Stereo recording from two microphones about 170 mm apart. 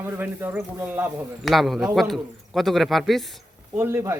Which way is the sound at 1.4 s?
Centre (ahead or behind).